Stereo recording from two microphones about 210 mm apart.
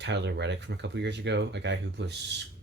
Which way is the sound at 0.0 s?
55° right (ahead or behind).